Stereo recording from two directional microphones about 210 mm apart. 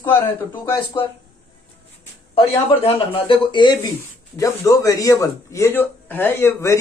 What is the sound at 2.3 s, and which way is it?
A man's voice, 25° left (ahead or behind).